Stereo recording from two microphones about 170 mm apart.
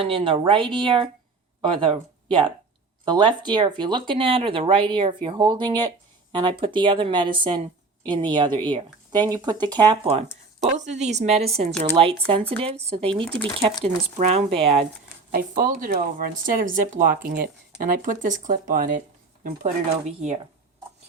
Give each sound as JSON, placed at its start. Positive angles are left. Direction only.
{"t": 0.0, "sound": "speech", "side_deg": -30}
{"t": 3.0, "sound": "speech", "side_deg": -25}
{"t": 13.2, "sound": "speech", "side_deg": 5}
{"t": 13.6, "sound": "speech", "side_deg": -35}
{"t": 15.3, "sound": "speech", "side_deg": -55}